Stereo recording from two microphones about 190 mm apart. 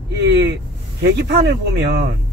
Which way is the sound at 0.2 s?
65° right (ahead or behind).